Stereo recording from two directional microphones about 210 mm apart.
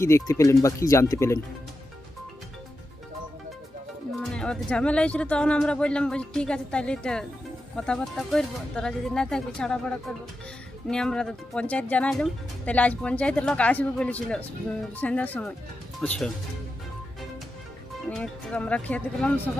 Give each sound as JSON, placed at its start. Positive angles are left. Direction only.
{"t": 0.0, "sound": "speech", "side_deg": 15}
{"t": 4.2, "sound": "speech", "side_deg": 5}
{"t": 18.1, "sound": "speech", "side_deg": 5}